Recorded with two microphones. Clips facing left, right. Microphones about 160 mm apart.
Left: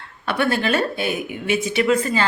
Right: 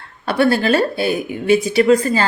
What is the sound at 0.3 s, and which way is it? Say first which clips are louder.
Speech: right 5 dB; 35° right (ahead or behind).